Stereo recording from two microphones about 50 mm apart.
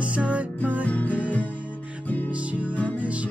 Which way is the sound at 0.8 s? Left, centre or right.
Left.